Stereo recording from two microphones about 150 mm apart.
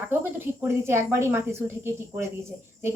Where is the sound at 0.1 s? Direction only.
15° right (ahead or behind).